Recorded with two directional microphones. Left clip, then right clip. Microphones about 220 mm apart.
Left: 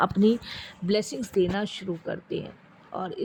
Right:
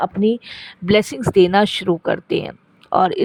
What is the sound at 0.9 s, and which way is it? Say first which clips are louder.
Speech: right 11 dB; 45° right (ahead or behind).